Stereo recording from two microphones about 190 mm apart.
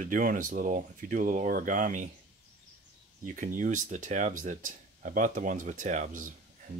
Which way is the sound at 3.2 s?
45° right (ahead or behind).